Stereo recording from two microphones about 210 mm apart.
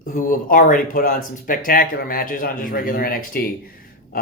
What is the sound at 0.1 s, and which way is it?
Speech, 40° left (ahead or behind).